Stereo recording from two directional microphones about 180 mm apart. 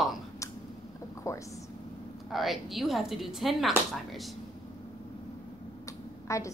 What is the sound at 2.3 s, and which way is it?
A woman's voice, centre (ahead or behind).